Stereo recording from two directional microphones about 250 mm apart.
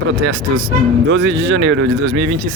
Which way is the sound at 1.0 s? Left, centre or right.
Right.